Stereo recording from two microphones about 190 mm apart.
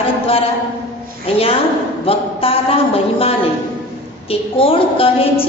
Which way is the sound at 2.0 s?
30° left (ahead or behind).